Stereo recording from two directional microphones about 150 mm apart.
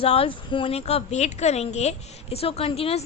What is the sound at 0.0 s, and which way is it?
A woman's voice, 40° left (ahead or behind).